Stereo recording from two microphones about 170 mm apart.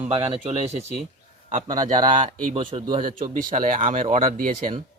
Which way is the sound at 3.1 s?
55° right (ahead or behind).